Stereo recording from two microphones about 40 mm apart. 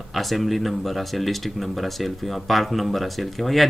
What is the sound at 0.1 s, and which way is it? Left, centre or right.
Speech, centre.